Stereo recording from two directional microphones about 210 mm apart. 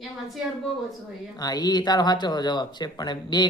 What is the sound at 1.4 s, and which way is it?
Speech, 20° left (ahead or behind).